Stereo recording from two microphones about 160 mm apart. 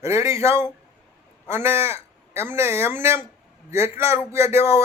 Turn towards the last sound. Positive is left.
turn(degrees=-15)  # may be behind; listen again after turning